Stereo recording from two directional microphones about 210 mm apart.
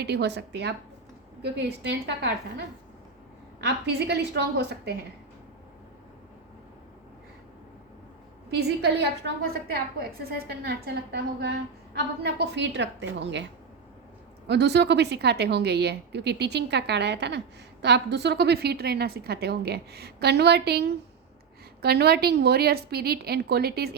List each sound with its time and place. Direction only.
0.0 s a woman's voice: 55° right (ahead or behind)
8.4 s a woman's voice: 50° right (ahead or behind)